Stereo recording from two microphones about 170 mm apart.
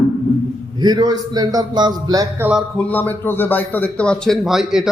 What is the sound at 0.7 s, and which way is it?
A man's voice, 25° right (ahead or behind).